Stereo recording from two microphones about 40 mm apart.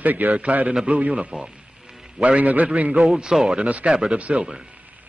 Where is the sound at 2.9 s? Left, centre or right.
Centre.